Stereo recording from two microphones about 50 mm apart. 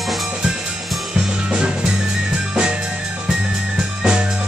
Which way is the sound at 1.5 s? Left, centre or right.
Centre.